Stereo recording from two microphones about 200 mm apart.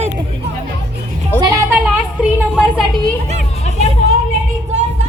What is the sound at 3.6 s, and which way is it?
Music, 35° left (ahead or behind).